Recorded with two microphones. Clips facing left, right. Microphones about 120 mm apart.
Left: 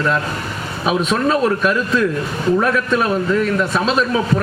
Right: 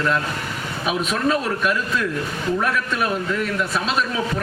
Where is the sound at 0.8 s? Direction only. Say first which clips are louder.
Left 5 dB; 35° left (ahead or behind).